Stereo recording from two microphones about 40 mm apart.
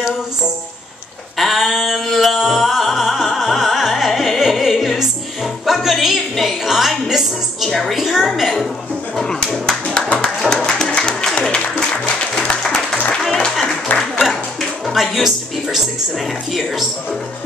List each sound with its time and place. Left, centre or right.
1.4 s a sound: centre
2.3 s music: centre
5.7 s speech: centre
7.7 s a woman's voice: centre
8.0 s a woman's voice: centre
10.2 s music: centre
12.4 s applause: centre
13.4 s music: centre
14.9 s music: centre